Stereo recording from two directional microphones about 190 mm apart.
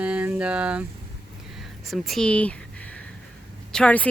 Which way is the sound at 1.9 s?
Centre (ahead or behind).